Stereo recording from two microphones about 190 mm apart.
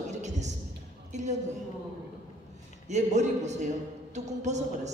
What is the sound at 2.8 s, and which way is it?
A man's voice, 35° right (ahead or behind).